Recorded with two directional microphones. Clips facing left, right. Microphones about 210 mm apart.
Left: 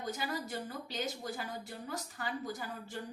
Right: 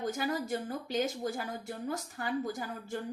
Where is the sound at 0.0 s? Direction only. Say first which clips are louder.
Right 5 dB; 50° right (ahead or behind).